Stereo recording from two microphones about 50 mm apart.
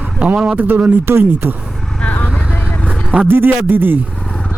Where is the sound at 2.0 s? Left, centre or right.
Left.